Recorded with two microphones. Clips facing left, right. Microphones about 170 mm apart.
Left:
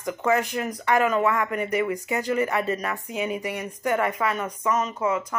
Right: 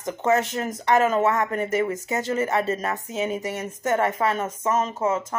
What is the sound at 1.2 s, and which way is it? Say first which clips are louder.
Speech: right 2 dB; 40° right (ahead or behind).